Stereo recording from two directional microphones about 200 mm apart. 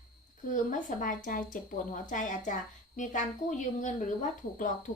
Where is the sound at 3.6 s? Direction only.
40° left (ahead or behind).